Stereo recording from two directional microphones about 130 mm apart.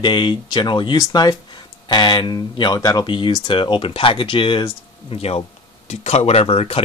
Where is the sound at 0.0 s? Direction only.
35° left (ahead or behind).